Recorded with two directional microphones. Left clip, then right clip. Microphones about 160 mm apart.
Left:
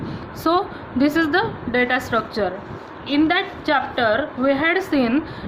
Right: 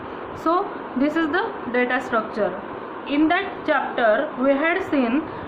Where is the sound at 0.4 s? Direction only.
55° left (ahead or behind).